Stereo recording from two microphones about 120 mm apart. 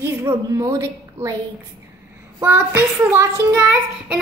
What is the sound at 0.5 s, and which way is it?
Speech, 25° right (ahead or behind).